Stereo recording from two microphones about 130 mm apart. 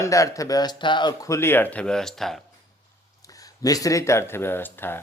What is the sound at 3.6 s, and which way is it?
Speech, 25° left (ahead or behind).